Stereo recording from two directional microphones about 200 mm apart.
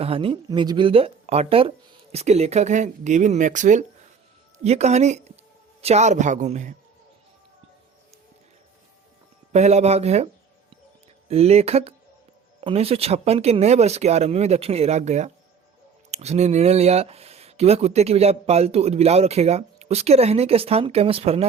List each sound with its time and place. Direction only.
0.0 s speech: 25° right (ahead or behind)
9.5 s speech: 35° right (ahead or behind)
11.3 s speech: 30° right (ahead or behind)